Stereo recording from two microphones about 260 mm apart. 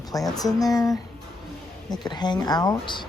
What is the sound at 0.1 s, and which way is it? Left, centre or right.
Speech, centre.